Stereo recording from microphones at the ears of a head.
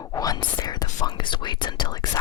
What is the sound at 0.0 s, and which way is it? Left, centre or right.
Whispering, left.